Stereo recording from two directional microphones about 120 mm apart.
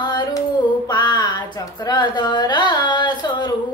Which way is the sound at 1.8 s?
35° left (ahead or behind).